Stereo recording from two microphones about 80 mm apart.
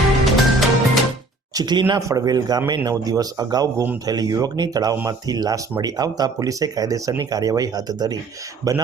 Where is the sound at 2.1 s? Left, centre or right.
Right.